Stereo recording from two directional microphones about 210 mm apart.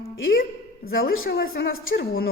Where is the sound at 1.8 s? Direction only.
75° left (ahead or behind).